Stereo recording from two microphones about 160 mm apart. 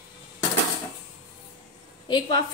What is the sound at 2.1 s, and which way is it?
Speech, 25° left (ahead or behind).